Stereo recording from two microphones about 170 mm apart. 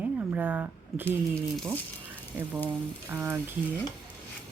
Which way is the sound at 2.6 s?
10° right (ahead or behind).